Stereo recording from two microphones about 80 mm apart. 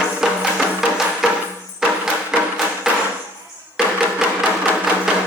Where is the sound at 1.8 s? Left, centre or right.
Centre.